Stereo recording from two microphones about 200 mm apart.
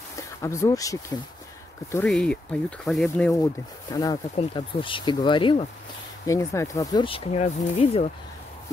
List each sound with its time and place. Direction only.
0.4 s speech: 15° left (ahead or behind)
2.0 s speech: 5° left (ahead or behind)
3.9 s speech: 20° left (ahead or behind)
6.2 s speech: 15° left (ahead or behind); by 8.1 s 30° left (ahead or behind)